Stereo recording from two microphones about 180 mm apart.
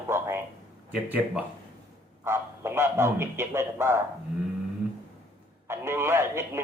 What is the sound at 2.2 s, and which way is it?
Speech, 15° right (ahead or behind).